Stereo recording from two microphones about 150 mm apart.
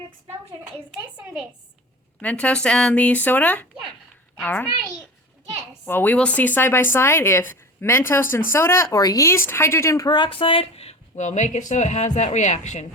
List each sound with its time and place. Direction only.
1.1 s a woman's voice: 10° right (ahead or behind)
2.2 s a child's voice: 5° left (ahead or behind); by 12.9 s 50° left (ahead or behind)